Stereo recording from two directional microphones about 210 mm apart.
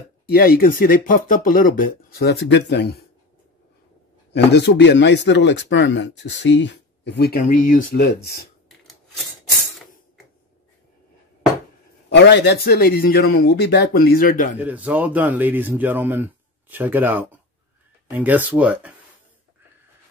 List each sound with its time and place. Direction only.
0.6 s speech: 40° left (ahead or behind)
2.1 s a man's voice: 55° left (ahead or behind)
4.3 s speech: 55° left (ahead or behind)
12.1 s a man's voice: 55° left (ahead or behind)
14.6 s speech: 10° right (ahead or behind)